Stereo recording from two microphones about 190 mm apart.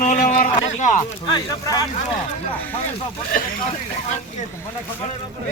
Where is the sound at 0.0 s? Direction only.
40° left (ahead or behind).